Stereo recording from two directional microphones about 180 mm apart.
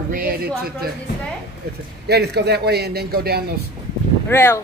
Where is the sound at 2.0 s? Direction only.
65° right (ahead or behind).